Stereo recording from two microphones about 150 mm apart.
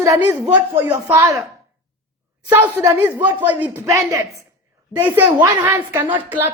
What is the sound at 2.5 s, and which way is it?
A woman's voice, 15° right (ahead or behind).